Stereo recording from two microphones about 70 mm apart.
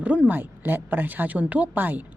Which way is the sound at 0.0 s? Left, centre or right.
Right.